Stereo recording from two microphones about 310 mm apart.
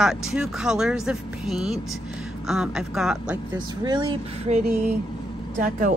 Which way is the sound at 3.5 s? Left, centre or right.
Centre.